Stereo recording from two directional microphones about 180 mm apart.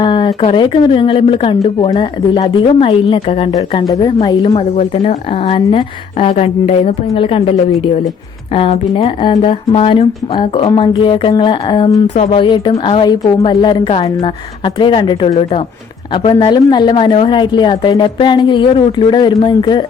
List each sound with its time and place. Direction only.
0.0 s a woman's voice: 25° left (ahead or behind)
4.5 s a woman's voice: 35° left (ahead or behind)
8.5 s a woman's voice: 30° left (ahead or behind)